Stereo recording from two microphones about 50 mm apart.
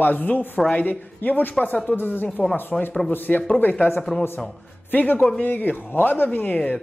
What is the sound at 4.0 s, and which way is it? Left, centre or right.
Speech, centre.